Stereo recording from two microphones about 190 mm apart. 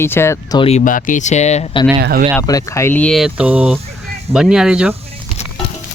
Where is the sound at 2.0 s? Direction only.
55° right (ahead or behind).